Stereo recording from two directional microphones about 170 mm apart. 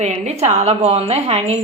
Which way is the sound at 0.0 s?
40° right (ahead or behind).